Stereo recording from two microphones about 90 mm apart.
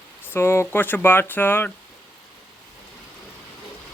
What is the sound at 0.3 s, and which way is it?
Speech, 30° left (ahead or behind).